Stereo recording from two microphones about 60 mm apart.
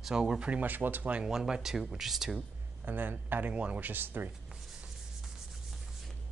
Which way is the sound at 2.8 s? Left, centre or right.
Right.